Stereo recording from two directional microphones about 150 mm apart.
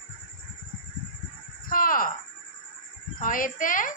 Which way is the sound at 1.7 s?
70° left (ahead or behind).